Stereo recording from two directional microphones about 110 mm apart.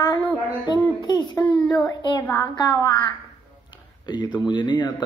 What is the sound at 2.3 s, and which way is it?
Speech, 30° left (ahead or behind).